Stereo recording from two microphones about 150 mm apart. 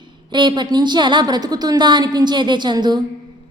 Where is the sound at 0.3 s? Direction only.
30° right (ahead or behind).